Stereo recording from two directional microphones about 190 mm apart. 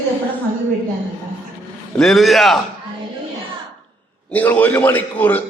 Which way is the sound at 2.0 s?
Centre (ahead or behind).